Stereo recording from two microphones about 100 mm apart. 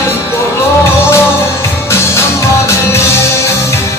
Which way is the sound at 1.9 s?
25° left (ahead or behind).